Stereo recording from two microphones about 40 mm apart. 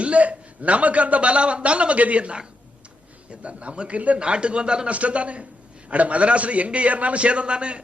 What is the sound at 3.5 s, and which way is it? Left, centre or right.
Speech, right.